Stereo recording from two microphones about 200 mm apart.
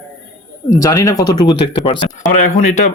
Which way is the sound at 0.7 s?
15° left (ahead or behind).